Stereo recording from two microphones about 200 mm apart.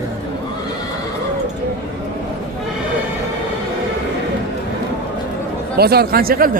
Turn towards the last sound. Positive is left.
turn(degrees=-50)  # may be behind; listen again after turning